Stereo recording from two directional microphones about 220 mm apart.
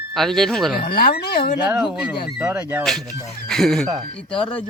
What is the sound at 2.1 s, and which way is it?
Speech, 50° left (ahead or behind).